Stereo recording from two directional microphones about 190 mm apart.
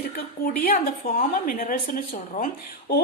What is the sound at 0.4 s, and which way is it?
A woman's voice, 50° left (ahead or behind).